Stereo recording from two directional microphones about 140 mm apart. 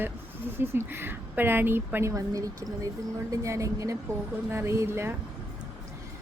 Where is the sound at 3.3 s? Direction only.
20° right (ahead or behind).